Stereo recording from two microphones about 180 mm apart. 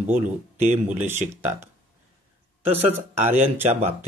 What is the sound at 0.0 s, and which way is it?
Speech, 40° right (ahead or behind).